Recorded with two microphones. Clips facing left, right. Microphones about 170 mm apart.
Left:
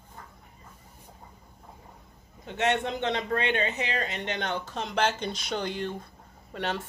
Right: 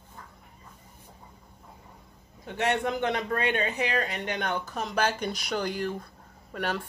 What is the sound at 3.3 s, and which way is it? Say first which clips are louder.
Speech: even; 45° right (ahead or behind).